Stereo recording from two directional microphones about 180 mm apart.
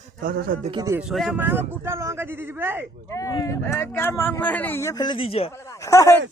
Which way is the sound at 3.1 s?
20° left (ahead or behind).